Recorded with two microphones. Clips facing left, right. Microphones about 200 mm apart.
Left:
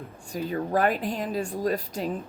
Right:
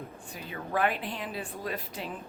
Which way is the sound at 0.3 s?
40° left (ahead or behind).